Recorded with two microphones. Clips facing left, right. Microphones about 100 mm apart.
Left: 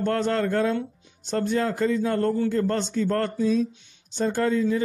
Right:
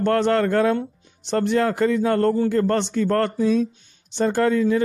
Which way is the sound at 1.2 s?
80° right.